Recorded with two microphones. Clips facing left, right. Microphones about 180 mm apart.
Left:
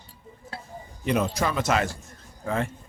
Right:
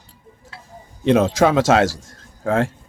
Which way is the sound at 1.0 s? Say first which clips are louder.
Right 10 dB; 90° right.